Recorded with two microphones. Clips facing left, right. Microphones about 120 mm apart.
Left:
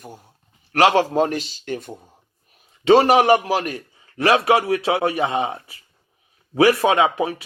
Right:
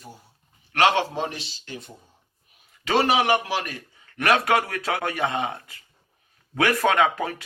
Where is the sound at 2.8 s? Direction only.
35° left (ahead or behind).